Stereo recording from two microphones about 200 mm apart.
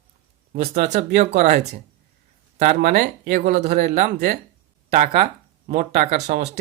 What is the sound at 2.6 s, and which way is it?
Speech, 45° right (ahead or behind).